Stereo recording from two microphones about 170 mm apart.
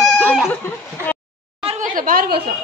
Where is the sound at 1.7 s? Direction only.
50° right (ahead or behind).